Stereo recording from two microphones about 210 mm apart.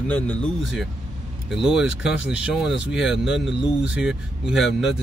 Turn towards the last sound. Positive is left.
turn(degrees=0)  # may be behind; listen again after turning